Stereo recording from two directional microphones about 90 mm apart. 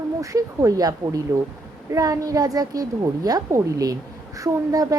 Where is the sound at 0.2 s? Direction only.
40° right (ahead or behind).